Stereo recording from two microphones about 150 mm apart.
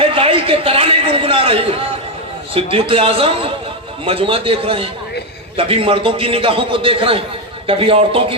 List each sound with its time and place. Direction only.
0.0 s a man's voice: 35° right (ahead or behind)